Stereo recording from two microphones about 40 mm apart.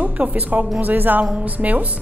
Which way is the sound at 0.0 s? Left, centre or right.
Right.